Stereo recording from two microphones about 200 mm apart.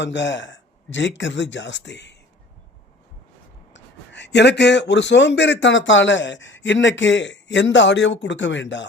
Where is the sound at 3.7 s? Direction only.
60° left (ahead or behind).